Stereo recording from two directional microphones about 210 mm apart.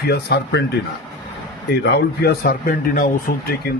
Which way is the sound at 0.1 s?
55° left (ahead or behind).